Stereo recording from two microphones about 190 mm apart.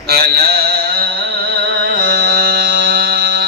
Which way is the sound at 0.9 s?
55° right (ahead or behind).